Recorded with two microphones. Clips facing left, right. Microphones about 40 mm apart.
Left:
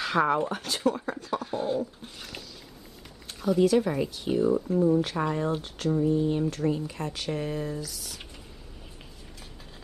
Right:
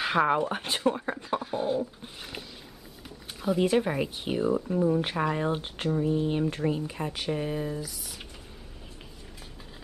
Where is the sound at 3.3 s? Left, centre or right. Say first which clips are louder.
Left 2 dB; right.